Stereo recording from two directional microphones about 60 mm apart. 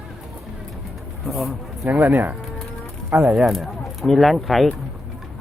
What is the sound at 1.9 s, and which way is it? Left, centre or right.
Speech, right.